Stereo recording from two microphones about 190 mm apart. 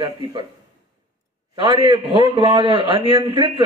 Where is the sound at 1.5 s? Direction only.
25° right (ahead or behind).